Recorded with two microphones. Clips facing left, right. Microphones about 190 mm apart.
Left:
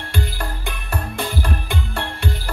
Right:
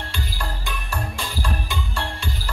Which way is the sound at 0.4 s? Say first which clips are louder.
Left 2 dB; 55° left (ahead or behind).